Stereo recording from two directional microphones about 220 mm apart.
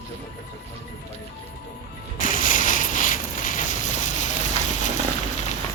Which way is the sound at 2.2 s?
35° left (ahead or behind).